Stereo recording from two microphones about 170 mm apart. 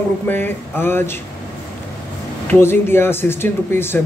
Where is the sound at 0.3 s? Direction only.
10° left (ahead or behind).